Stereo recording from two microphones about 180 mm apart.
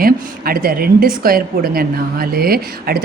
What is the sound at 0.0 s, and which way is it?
A woman's voice, 55° right (ahead or behind).